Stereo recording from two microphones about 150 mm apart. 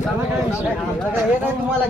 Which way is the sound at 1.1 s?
10° right (ahead or behind).